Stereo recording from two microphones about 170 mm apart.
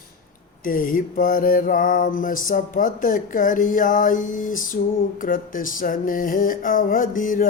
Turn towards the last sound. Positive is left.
turn(degrees=55)  # may be behind; listen again after turning